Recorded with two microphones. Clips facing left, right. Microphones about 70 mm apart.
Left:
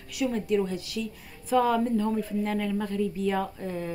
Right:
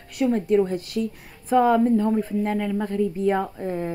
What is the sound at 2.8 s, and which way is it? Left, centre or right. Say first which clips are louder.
A woman's voice: right 5 dB; right.